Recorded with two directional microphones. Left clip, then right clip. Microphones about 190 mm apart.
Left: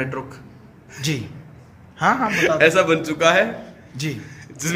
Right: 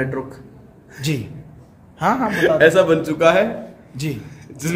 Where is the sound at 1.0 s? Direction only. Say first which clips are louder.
Right 1 dB; 5° left (ahead or behind).